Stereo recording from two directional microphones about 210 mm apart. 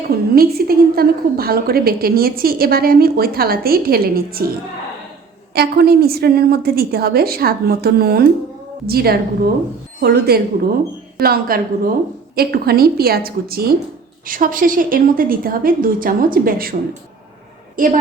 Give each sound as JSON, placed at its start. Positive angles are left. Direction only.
{"t": 0.3, "sound": "a woman's voice", "side_deg": -45}
{"t": 5.5, "sound": "a woman's voice", "side_deg": -45}